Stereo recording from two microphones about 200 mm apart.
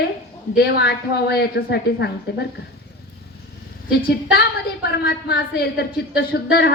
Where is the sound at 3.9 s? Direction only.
50° left (ahead or behind).